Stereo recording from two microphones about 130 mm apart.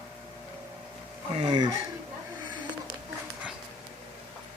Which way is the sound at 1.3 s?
40° right (ahead or behind).